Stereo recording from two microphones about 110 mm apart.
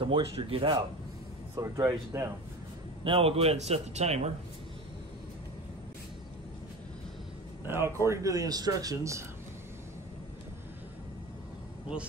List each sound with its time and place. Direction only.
0.0 s speech: 55° right (ahead or behind)
1.6 s speech: 25° right (ahead or behind)
3.0 s a man's voice: 55° right (ahead or behind); by 4.3 s 75° right (ahead or behind)
7.6 s speech: 25° right (ahead or behind)